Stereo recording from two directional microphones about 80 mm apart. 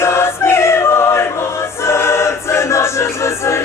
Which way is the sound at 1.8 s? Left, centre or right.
Left.